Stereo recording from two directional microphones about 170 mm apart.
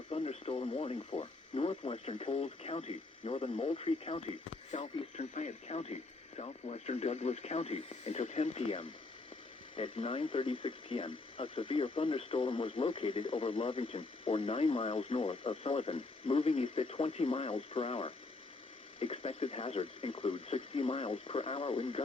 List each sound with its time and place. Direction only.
0.1 s speech: 35° left (ahead or behind)